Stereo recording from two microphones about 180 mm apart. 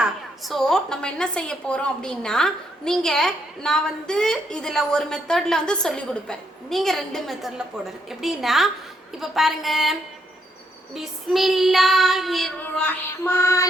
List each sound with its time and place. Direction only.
0.0 s a woman's voice: centre (ahead or behind)
12.6 s music: 15° left (ahead or behind)